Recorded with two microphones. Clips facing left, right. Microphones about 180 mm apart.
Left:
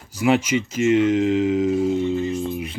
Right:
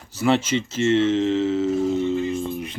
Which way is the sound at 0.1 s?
10° left (ahead or behind).